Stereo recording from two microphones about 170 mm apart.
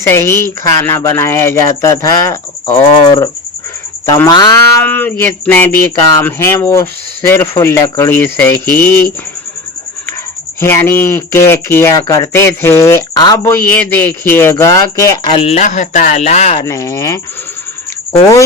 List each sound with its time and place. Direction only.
0.0 s speech: 15° left (ahead or behind)
4.8 s speech: 10° left (ahead or behind)
10.6 s speech: 15° left (ahead or behind)
15.3 s speech: 35° left (ahead or behind)
16.6 s speech: 20° left (ahead or behind)